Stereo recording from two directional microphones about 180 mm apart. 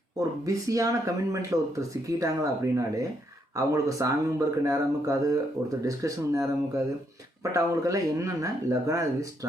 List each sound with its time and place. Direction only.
0.2 s speech: 20° right (ahead or behind)